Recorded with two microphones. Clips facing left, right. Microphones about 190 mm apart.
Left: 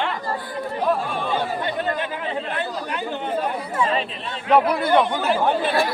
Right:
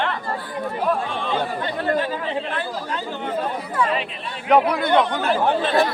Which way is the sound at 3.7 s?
25° left (ahead or behind).